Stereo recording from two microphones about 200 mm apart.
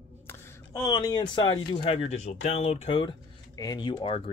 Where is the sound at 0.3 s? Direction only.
15° left (ahead or behind).